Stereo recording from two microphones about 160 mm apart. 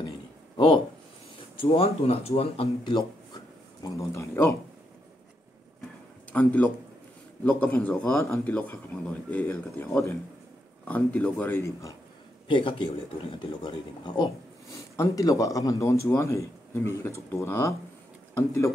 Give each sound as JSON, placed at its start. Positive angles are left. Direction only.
{"t": 1.6, "sound": "speech", "side_deg": 35}
{"t": 3.9, "sound": "speech", "side_deg": 20}
{"t": 6.3, "sound": "speech", "side_deg": 10}
{"t": 12.4, "sound": "speech", "side_deg": 30}